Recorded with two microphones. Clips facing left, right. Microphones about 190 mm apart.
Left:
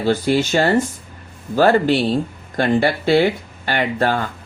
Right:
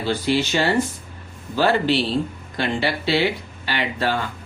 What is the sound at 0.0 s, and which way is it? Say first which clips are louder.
Speech: left 4 dB; 45° left (ahead or behind).